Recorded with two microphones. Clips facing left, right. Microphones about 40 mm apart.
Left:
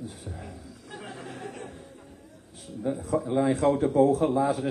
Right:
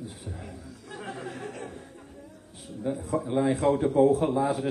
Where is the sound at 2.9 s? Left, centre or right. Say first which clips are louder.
Left 1 dB; centre.